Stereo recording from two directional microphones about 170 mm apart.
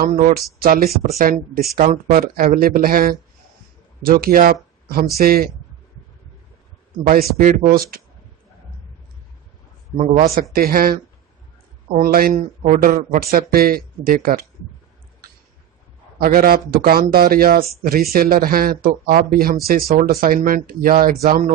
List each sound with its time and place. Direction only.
0.0 s speech: 55° right (ahead or behind)
7.3 s speech: 55° right (ahead or behind)
10.5 s speech: 60° right (ahead or behind)
16.2 s speech: 60° right (ahead or behind)